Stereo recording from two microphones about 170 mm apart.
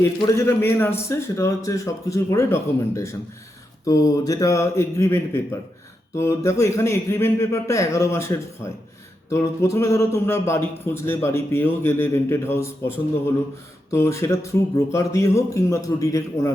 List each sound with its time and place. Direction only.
0.0 s a man's voice: 15° left (ahead or behind)
13.9 s a man's voice: 15° left (ahead or behind)